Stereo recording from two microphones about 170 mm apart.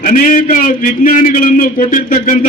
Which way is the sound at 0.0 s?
55° left (ahead or behind).